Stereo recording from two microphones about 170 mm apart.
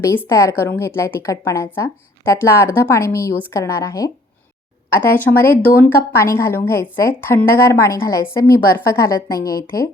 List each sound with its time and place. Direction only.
0.3 s a woman's voice: 15° left (ahead or behind)